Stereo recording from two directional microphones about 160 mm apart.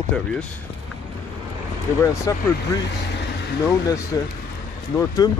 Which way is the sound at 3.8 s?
20° left (ahead or behind).